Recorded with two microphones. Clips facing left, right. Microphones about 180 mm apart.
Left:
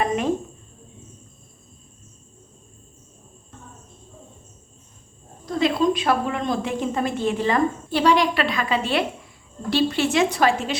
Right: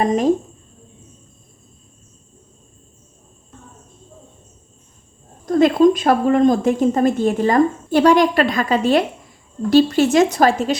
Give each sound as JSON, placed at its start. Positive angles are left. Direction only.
{"t": 0.0, "sound": "a woman's voice", "side_deg": -35}
{"t": 5.5, "sound": "a woman's voice", "side_deg": -50}